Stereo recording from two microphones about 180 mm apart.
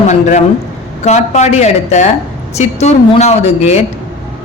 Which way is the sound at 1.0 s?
40° left (ahead or behind).